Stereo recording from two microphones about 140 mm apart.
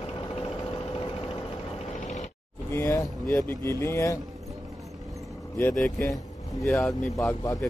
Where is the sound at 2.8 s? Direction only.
20° left (ahead or behind).